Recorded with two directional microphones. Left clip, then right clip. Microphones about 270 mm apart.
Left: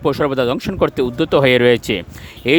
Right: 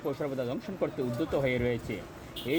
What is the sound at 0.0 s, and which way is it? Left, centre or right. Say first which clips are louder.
Speech: left 16 dB; left.